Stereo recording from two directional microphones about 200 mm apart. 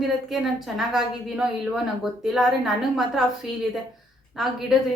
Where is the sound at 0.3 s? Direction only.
Centre (ahead or behind).